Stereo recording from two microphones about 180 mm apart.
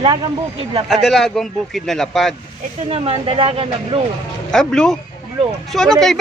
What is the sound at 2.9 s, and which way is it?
Speech, 35° right (ahead or behind).